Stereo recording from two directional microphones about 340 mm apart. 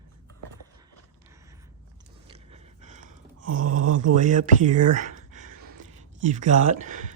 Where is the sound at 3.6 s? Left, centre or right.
Right.